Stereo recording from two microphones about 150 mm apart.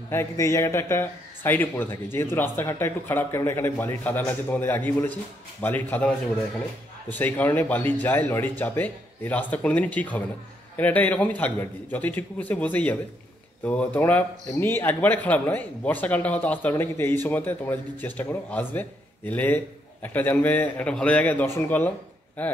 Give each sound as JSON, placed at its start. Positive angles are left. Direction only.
{"t": 0.1, "sound": "speech", "side_deg": 15}